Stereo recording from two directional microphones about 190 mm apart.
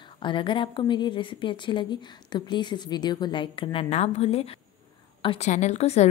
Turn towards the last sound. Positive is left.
turn(degrees=35)  # may be behind; listen again after turning